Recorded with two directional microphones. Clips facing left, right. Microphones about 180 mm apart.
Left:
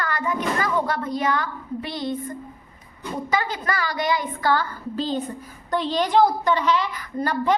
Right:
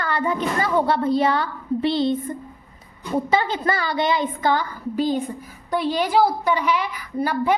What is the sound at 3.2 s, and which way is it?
A woman's voice, 30° right (ahead or behind).